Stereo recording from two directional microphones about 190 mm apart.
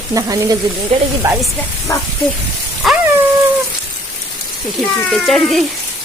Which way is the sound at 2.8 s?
Centre (ahead or behind).